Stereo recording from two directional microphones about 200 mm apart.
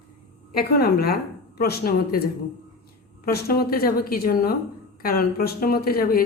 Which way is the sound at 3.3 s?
50° left (ahead or behind).